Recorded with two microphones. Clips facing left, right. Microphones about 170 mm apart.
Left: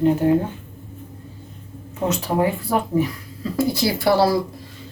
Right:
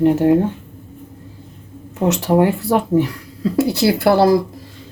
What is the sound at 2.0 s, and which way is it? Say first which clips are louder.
Speech: right 6 dB; 75° right (ahead or behind).